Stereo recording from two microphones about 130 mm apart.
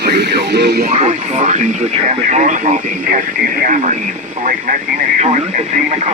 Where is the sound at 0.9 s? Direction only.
60° right (ahead or behind).